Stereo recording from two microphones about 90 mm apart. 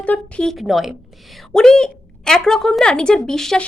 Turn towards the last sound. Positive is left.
turn(degrees=5)  # may be behind; listen again after turning